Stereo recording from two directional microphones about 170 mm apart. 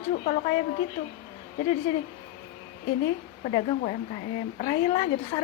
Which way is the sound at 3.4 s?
40° left (ahead or behind).